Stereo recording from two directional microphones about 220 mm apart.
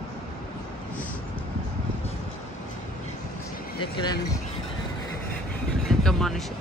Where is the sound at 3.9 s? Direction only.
20° left (ahead or behind).